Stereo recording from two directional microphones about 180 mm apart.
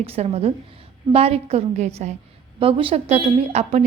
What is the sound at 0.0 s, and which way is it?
A woman's voice, 35° right (ahead or behind).